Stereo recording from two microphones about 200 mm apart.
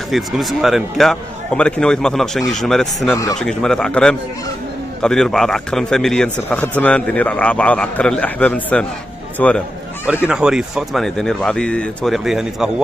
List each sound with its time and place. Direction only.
0.1 s speech: centre (ahead or behind)